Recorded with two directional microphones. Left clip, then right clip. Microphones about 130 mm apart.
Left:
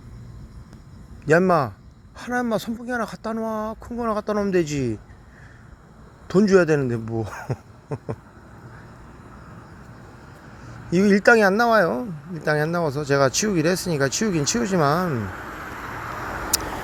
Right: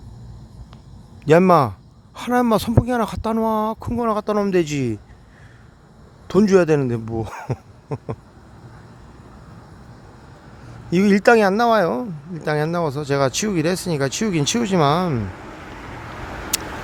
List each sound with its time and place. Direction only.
1.2 s a man's voice: 20° right (ahead or behind)
2.1 s a man's voice: 35° right (ahead or behind)
3.8 s speech: 40° right (ahead or behind)
4.1 s a man's voice: 25° right (ahead or behind)
6.2 s speech: 20° right (ahead or behind)
7.3 s cough: 35° right (ahead or behind)
10.9 s a man's voice: 25° right (ahead or behind)
11.3 s speech: 5° right (ahead or behind)
15.2 s vehicle: 25° left (ahead or behind)